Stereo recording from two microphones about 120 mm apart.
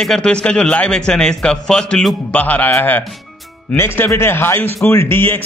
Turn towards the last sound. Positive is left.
turn(degrees=20)  # may be behind; listen again after turning